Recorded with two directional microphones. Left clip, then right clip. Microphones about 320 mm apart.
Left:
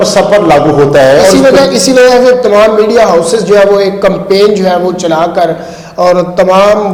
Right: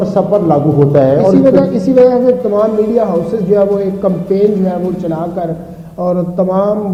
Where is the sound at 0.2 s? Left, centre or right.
Centre.